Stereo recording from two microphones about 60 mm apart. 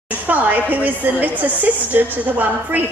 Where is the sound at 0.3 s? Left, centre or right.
Right.